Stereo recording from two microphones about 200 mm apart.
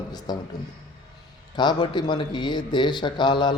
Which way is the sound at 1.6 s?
20° left (ahead or behind).